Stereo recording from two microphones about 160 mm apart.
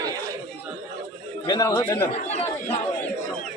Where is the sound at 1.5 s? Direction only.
20° left (ahead or behind).